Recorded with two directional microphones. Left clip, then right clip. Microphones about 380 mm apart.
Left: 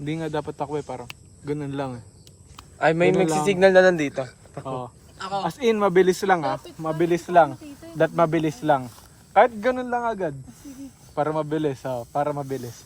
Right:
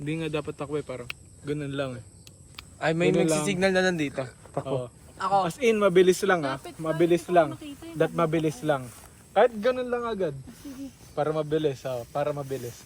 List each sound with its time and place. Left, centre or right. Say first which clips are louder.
0.0 s speech: left 3 dB; centre
3.9 s speech: left 4 dB; centre
4.6 s speech: right 1 dB; centre
5.5 s speech: left 1 dB; centre